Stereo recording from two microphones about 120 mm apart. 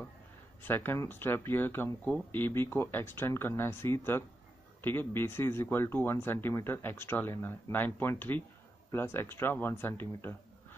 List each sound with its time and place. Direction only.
0.6 s speech: 15° left (ahead or behind)